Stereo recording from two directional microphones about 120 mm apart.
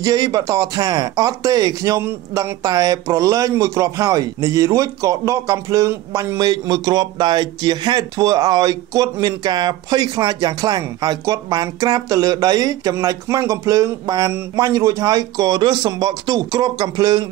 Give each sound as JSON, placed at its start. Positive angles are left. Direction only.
{"t": 0.0, "sound": "speech", "side_deg": -30}